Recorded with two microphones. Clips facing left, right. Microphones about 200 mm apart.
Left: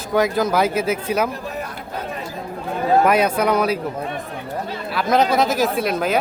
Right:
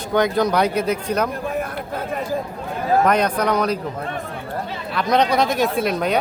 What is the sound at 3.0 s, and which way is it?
Speech, 5° left (ahead or behind).